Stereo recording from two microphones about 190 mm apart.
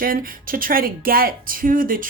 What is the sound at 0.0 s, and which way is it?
Speech, 50° right (ahead or behind).